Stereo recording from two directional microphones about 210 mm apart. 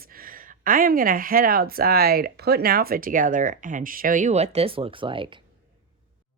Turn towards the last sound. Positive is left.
turn(degrees=-25)  # may be behind; listen again after turning